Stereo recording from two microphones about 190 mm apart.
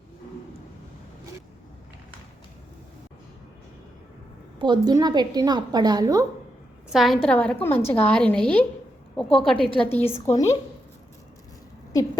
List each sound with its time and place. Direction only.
4.6 s a woman's voice: 20° right (ahead or behind)
6.9 s a woman's voice: centre (ahead or behind)
10.1 s speech: 35° left (ahead or behind)